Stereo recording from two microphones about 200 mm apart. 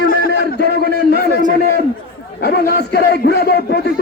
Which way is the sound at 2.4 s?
55° left (ahead or behind).